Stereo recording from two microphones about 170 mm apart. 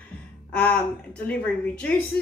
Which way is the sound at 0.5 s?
10° left (ahead or behind).